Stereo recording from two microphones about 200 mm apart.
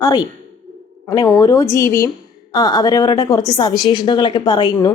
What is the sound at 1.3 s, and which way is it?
A woman's voice, 15° left (ahead or behind).